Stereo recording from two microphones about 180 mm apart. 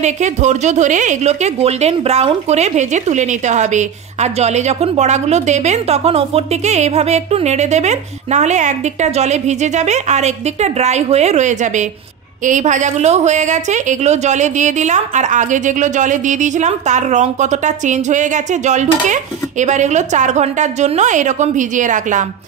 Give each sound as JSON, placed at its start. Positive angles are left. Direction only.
{"t": 0.0, "sound": "a woman's voice", "side_deg": -40}